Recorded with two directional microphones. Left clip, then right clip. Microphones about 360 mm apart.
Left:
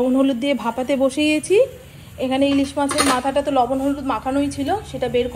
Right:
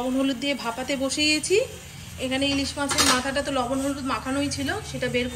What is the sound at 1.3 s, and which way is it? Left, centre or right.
Speech, left.